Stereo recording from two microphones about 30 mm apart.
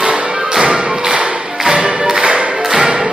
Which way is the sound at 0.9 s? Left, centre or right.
Right.